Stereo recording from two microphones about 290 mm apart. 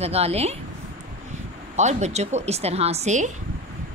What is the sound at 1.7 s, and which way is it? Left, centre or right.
Speech, right.